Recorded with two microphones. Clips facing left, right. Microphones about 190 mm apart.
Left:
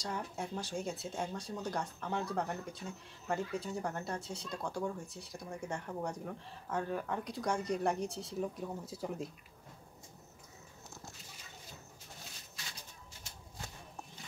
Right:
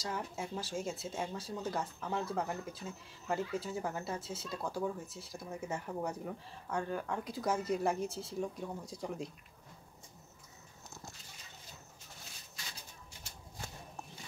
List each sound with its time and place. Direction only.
0.0 s speech: centre (ahead or behind)